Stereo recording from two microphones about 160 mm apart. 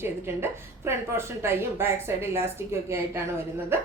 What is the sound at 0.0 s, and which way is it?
A woman's voice, 15° right (ahead or behind).